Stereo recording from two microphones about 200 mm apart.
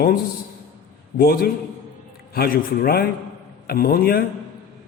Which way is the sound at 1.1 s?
50° left (ahead or behind).